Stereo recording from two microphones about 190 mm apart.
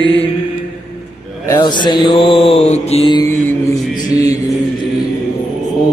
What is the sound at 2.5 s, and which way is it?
Mantra, 35° left (ahead or behind).